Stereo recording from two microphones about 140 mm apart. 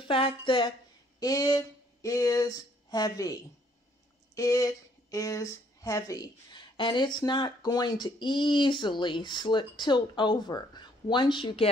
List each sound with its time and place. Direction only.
0.0 s speech: 40° left (ahead or behind)
1.2 s speech: 25° left (ahead or behind)
4.4 s speech: 25° left (ahead or behind)